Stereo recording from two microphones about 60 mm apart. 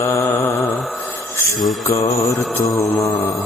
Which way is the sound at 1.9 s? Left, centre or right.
Left.